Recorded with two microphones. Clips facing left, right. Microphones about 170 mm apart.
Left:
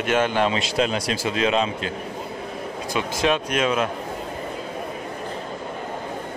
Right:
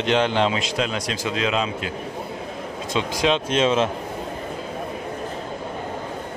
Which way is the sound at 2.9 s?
20° right (ahead or behind).